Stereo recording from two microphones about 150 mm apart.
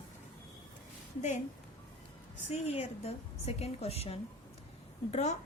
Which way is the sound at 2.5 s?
45° left (ahead or behind).